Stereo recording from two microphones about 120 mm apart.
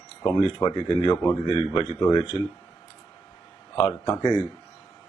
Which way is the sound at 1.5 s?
45° left (ahead or behind).